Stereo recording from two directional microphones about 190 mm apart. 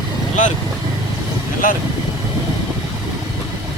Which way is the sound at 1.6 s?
45° left (ahead or behind).